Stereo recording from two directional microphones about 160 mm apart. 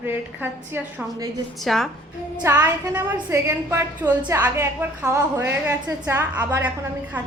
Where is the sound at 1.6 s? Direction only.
Centre (ahead or behind).